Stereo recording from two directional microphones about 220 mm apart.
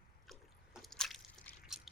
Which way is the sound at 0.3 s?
Centre (ahead or behind).